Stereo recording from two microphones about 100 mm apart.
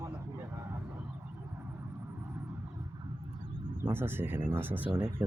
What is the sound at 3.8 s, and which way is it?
Speech, 25° right (ahead or behind).